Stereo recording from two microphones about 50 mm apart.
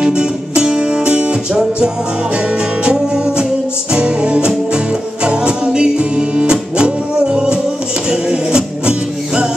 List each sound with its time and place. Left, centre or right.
0.0 s music: centre